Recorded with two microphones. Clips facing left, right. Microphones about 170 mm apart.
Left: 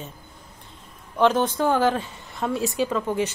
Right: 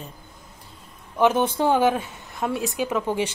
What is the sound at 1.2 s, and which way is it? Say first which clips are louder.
A woman's voice: even; 10° right (ahead or behind).